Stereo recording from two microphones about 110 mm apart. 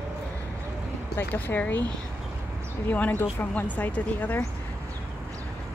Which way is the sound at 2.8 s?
15° left (ahead or behind).